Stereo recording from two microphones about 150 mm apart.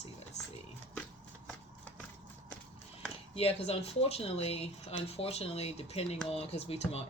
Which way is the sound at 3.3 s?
40° left (ahead or behind).